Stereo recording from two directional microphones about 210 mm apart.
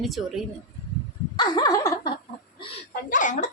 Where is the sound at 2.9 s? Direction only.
40° left (ahead or behind).